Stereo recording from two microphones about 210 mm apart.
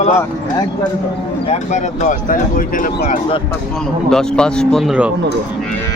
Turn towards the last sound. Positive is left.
turn(degrees=-5)  # may be behind; listen again after turning